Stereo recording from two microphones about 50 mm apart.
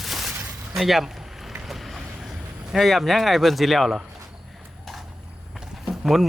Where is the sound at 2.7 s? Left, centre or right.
Centre.